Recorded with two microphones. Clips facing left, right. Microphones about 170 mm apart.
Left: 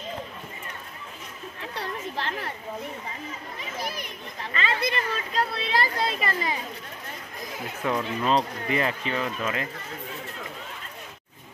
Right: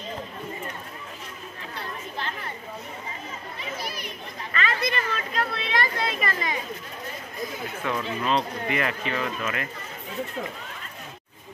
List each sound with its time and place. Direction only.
1.8 s chatter: 75° left (ahead or behind)
3.8 s chatter: 50° left (ahead or behind)
4.6 s a woman's voice: 30° left (ahead or behind)
7.8 s speech: 15° left (ahead or behind)
8.6 s speech: 30° left (ahead or behind)